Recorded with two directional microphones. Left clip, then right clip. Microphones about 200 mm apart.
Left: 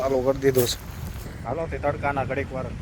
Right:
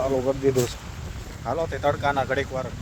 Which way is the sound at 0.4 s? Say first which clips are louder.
Left 1 dB; 20° left (ahead or behind).